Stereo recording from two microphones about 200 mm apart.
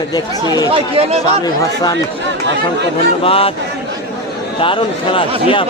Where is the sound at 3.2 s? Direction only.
30° left (ahead or behind).